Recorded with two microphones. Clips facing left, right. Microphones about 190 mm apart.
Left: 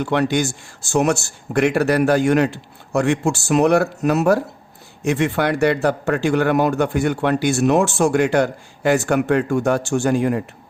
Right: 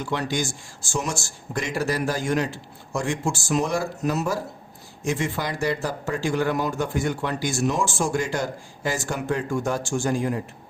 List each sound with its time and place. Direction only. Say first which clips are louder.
0.0 s speech: left 8 dB; 65° left (ahead or behind)